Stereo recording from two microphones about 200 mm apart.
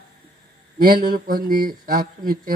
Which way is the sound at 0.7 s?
50° right (ahead or behind).